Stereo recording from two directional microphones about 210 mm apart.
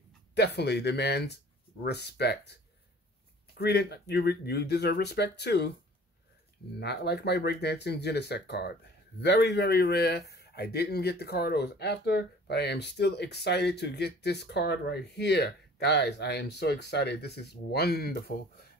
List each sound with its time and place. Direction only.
0.3 s speech: 55° left (ahead or behind)
6.8 s speech: 50° left (ahead or behind)